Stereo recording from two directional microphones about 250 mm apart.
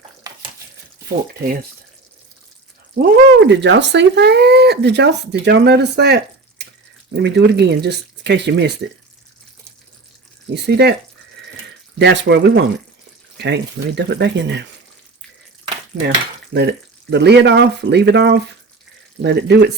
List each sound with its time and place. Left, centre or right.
3.0 s speech: right
7.2 s frying: right
10.5 s speech: right
11.9 s frying: right
16.0 s frying: right
19.2 s speech: right